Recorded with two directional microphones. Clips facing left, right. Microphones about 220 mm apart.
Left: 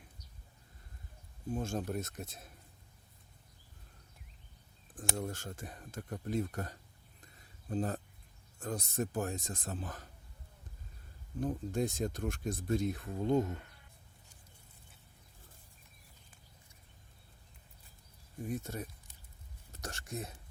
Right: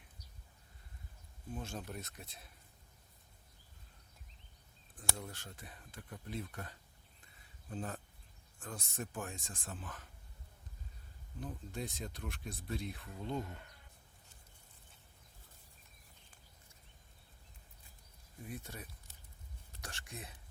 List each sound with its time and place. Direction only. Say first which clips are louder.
1.5 s speech: left 8 dB; 45° left (ahead or behind)
5.1 s speech: left 9 dB; 45° left (ahead or behind)
11.3 s speech: left 10 dB; 45° left (ahead or behind)
18.4 s speech: left 8 dB; 45° left (ahead or behind)